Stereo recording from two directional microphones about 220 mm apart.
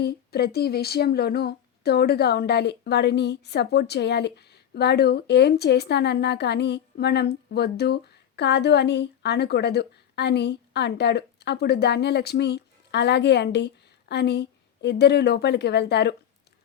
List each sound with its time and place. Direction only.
0.0 s speech: 45° left (ahead or behind)